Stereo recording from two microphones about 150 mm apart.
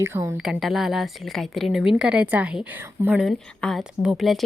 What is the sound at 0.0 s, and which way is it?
Speech, 15° right (ahead or behind).